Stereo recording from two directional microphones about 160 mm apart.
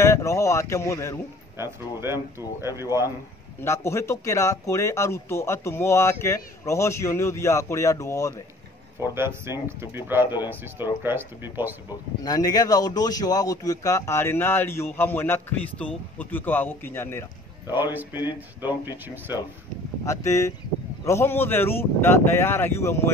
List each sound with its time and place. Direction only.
0.0 s speech: 20° left (ahead or behind)
2.1 s speech: 15° right (ahead or behind)
3.6 s a man's voice: 15° left (ahead or behind)
9.1 s speech: 15° right (ahead or behind)
12.2 s a man's voice: 25° left (ahead or behind)
18.1 s speech: 25° left (ahead or behind)
20.1 s a man's voice: 20° left (ahead or behind)